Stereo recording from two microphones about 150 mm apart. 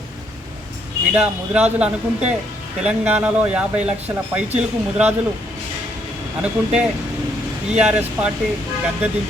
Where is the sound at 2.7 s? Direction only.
5° right (ahead or behind).